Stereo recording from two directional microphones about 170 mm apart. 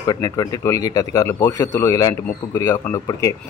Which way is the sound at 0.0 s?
20° left (ahead or behind).